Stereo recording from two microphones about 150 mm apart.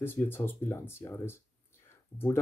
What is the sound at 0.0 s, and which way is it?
Speech, 15° left (ahead or behind).